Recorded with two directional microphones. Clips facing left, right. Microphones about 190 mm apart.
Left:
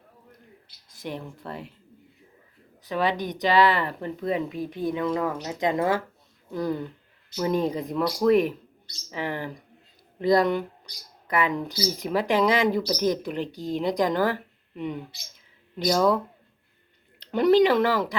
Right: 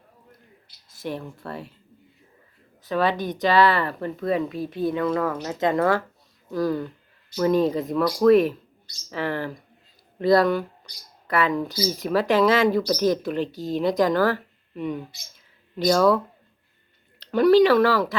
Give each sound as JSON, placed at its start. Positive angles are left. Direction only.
{"t": 0.9, "sound": "speech", "side_deg": 20}
{"t": 2.8, "sound": "speech", "side_deg": 15}